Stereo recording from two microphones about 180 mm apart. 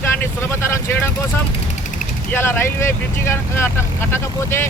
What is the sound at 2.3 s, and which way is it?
Speech, 15° left (ahead or behind).